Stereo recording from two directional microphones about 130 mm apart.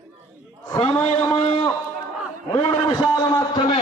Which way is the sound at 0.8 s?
45° left (ahead or behind).